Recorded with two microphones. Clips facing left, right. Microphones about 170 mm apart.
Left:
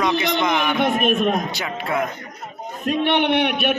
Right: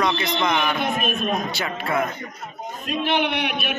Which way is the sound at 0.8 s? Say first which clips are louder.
Left 6 dB; 65° left (ahead or behind).